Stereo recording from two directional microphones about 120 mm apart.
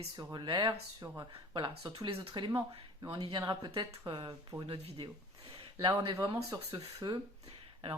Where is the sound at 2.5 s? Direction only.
25° right (ahead or behind).